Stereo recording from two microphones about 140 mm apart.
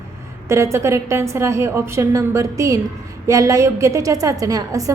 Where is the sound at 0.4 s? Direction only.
20° right (ahead or behind).